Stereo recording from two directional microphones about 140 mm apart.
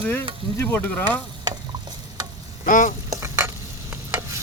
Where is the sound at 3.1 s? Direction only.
20° right (ahead or behind).